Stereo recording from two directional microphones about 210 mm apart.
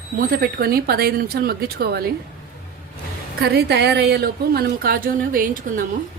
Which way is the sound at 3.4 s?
50° right (ahead or behind).